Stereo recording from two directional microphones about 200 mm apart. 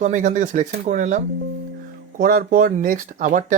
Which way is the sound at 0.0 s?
35° right (ahead or behind).